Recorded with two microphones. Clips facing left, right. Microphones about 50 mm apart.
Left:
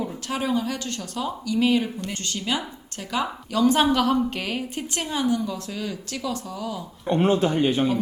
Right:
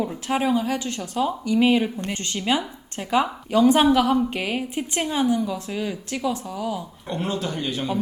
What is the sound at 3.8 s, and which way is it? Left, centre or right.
A woman's voice, centre.